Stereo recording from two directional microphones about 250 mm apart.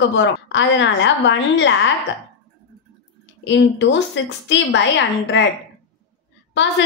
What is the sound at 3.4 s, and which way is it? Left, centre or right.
A woman's voice, left.